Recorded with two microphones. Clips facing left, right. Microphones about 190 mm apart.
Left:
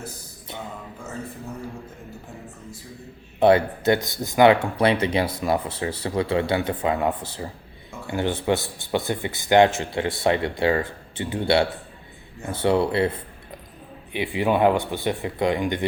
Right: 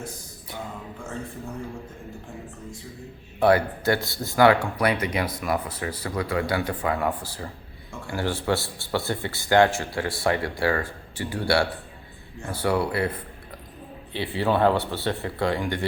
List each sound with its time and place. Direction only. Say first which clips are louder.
3.4 s speech: left 3 dB; 20° left (ahead or behind)